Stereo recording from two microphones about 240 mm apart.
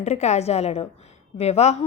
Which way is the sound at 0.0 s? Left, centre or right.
Left.